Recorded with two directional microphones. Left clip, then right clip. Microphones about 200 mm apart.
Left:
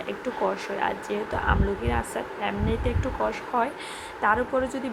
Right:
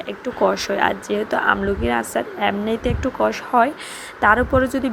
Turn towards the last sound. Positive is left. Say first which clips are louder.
# right 8 dB
turn(degrees=-30)  # may be behind; listen again after turning